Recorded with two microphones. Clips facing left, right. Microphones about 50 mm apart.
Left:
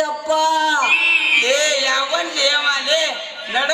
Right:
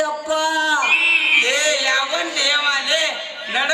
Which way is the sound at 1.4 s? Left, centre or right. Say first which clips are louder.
Left 1 dB; centre.